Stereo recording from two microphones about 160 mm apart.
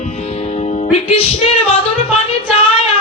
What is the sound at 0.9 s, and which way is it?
Speech, 40° left (ahead or behind).